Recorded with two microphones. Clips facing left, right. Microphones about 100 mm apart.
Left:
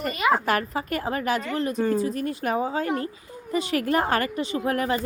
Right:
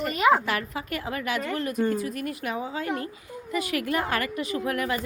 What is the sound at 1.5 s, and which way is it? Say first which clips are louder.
Speech: left 1 dB; 25° left (ahead or behind).